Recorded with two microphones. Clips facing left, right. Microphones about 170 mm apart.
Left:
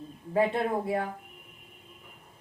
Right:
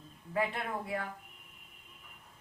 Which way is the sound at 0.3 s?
30° left (ahead or behind).